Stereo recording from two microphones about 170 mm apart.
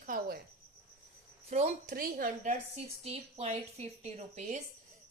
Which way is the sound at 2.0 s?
55° right (ahead or behind).